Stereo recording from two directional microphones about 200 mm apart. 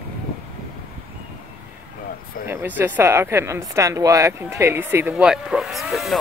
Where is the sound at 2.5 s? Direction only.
10° right (ahead or behind).